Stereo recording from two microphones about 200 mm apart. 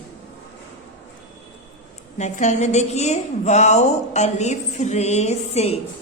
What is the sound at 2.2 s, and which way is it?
A woman's voice, 35° left (ahead or behind).